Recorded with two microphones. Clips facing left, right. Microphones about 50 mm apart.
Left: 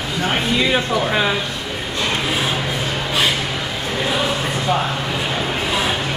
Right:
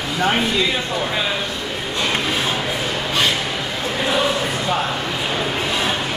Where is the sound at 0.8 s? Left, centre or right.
Left.